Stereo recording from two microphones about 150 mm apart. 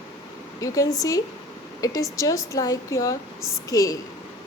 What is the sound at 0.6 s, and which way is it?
A woman's voice, 25° left (ahead or behind).